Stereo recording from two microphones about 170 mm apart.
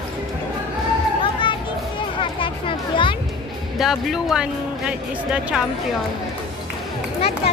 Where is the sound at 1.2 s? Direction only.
30° left (ahead or behind).